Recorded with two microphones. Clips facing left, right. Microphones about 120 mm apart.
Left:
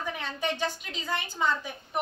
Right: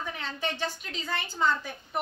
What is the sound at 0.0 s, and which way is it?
A woman's voice, 15° left (ahead or behind).